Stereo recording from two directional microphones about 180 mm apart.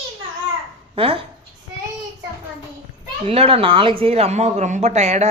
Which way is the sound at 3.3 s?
35° right (ahead or behind).